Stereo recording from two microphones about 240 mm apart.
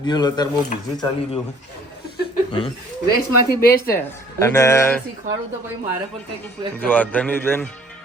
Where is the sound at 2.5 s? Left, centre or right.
Left.